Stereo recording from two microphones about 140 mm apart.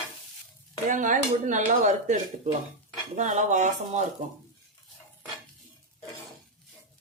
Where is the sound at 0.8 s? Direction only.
65° right (ahead or behind).